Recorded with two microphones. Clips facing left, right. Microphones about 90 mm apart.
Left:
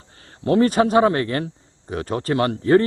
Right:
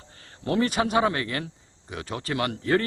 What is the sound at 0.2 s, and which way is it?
Speech, 35° left (ahead or behind).